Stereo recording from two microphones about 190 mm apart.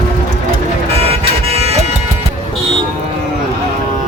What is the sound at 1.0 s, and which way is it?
Car alarm, 30° right (ahead or behind).